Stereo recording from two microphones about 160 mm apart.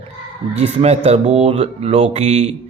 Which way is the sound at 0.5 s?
40° right (ahead or behind).